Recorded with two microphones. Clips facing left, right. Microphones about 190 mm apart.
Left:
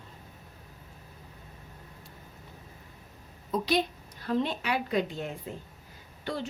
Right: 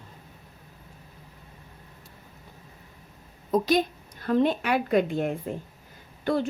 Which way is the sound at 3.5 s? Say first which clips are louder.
Right 5 dB; 45° right (ahead or behind).